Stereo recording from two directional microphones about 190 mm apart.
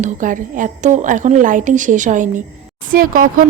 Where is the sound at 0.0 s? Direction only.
40° right (ahead or behind).